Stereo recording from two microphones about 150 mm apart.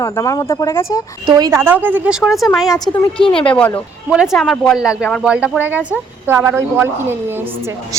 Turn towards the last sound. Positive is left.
turn(degrees=-15)  # may be behind; listen again after turning